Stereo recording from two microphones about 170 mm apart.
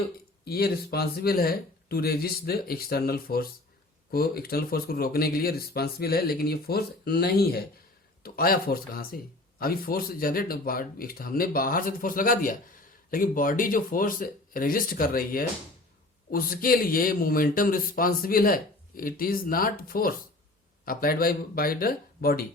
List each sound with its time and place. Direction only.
0.4 s speech: 65° left (ahead or behind)